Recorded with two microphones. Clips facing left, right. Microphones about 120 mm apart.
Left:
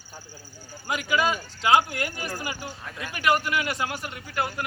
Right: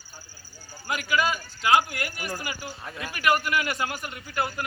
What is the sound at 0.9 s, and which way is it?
A man's voice, 20° left (ahead or behind).